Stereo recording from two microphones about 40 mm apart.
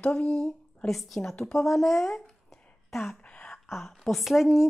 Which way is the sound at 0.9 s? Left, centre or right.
Centre.